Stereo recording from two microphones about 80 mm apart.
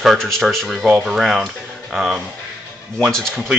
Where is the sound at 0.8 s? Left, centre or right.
Centre.